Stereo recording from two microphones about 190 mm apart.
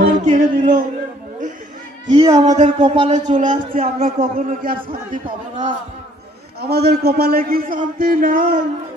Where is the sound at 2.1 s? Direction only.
20° right (ahead or behind).